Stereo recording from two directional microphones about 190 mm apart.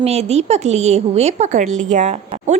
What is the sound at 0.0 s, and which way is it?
A woman's voice, 35° right (ahead or behind).